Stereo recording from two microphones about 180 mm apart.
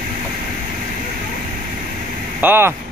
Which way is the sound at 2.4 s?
10° right (ahead or behind).